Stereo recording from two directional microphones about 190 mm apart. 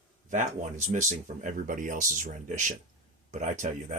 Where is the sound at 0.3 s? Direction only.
40° right (ahead or behind).